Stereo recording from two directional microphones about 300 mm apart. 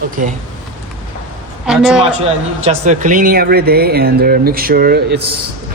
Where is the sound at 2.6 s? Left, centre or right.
Right.